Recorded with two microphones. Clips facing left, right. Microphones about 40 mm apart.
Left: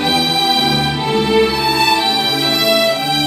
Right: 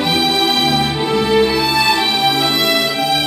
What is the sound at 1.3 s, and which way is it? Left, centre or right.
Music, right.